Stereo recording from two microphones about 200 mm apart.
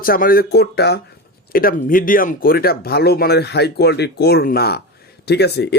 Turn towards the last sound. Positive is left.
turn(degrees=55)  # may be behind; listen again after turning